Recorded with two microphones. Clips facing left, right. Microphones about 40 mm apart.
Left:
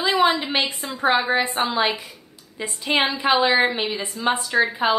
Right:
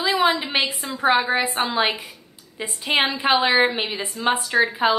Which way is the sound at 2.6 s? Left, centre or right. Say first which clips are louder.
Even; centre.